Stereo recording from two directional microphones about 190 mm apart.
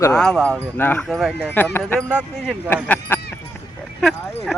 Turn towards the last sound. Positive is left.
turn(degrees=0)  # may be behind; listen again after turning